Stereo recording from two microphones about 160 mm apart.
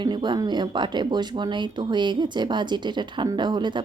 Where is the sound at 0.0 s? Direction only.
30° right (ahead or behind).